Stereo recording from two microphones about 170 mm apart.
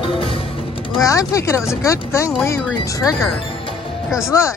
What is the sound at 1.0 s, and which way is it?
Speech, 20° left (ahead or behind).